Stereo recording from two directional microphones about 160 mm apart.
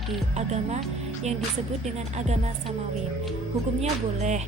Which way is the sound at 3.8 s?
45° right (ahead or behind).